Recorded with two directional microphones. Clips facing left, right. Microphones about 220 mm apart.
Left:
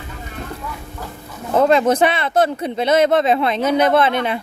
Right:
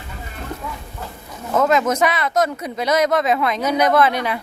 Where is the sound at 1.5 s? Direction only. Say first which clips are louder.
Left 3 dB; 30° left (ahead or behind).